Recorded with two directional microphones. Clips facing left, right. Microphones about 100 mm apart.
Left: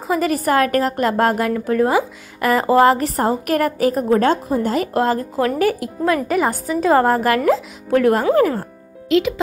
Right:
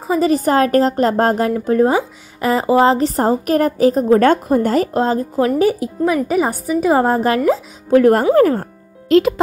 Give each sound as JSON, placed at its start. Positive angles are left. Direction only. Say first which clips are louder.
{"t": 0.1, "sound": "a woman's voice", "louder": "right 3 dB", "side_deg": -25}
{"t": 2.4, "sound": "a woman's voice", "louder": "even", "side_deg": -15}
{"t": 4.2, "sound": "a woman's voice", "louder": "right 4 dB", "side_deg": -55}
{"t": 4.9, "sound": "a woman's voice", "louder": "right 2 dB", "side_deg": -20}
{"t": 7.9, "sound": "a woman's voice", "louder": "right 4 dB", "side_deg": -40}